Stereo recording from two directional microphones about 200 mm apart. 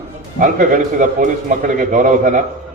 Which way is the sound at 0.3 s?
40° right (ahead or behind).